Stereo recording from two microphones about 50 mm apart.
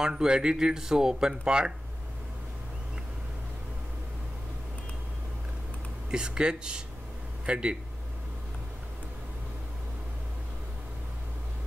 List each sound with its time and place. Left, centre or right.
0.0 s speech: centre
6.0 s speech: centre